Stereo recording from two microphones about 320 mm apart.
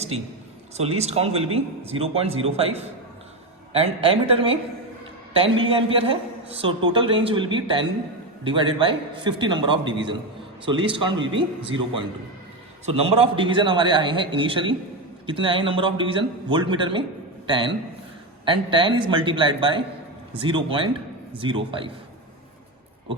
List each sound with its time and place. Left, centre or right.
0.8 s a man's voice: centre
12.8 s a man's voice: centre